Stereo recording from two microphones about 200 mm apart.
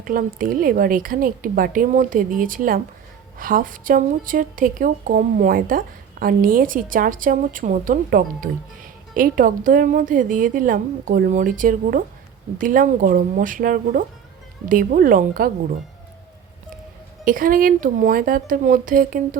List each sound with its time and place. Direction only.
0.0 s a woman's voice: 45° right (ahead or behind)
17.2 s a woman's voice: 45° right (ahead or behind)